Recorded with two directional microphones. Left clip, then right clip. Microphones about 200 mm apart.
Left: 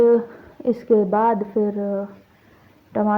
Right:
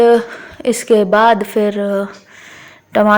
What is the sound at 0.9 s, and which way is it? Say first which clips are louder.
Speech: right 8 dB; 40° right (ahead or behind).